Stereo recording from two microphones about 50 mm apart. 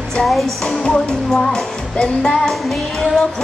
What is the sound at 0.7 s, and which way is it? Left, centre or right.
Music, centre.